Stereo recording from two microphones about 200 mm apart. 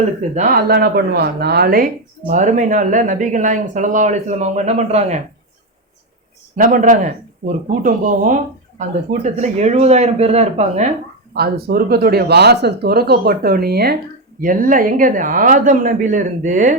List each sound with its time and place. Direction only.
0.3 s speech: 45° right (ahead or behind)
6.6 s speech: 40° right (ahead or behind)
11.3 s speech: 50° right (ahead or behind)